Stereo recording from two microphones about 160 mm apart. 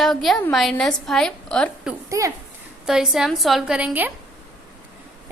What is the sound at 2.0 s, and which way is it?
Speech, 20° right (ahead or behind).